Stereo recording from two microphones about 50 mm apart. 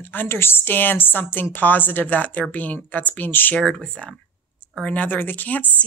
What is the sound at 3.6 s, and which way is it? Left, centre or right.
Speech, centre.